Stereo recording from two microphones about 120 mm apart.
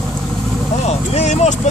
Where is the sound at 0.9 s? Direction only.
70° left (ahead or behind).